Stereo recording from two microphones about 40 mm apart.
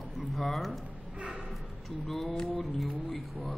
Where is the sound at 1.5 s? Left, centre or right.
Centre.